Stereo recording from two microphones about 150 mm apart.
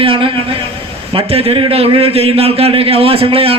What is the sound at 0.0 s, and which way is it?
A man's voice, 35° right (ahead or behind).